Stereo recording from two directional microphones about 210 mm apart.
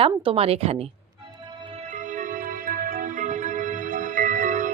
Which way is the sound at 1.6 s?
30° right (ahead or behind).